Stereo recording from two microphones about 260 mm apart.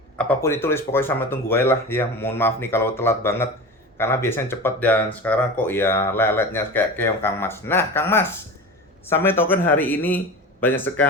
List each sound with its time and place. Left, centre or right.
0.2 s speech: centre